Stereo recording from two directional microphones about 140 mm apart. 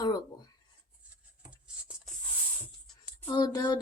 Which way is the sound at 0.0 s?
30° left (ahead or behind).